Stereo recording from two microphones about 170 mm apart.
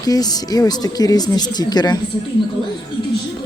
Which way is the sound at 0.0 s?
20° left (ahead or behind).